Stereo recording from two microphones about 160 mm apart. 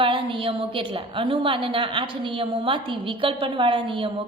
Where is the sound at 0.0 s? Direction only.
30° right (ahead or behind).